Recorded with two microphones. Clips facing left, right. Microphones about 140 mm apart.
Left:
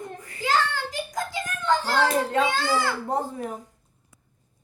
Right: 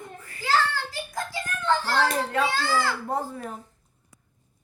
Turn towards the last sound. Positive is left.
turn(degrees=15)  # may be behind; listen again after turning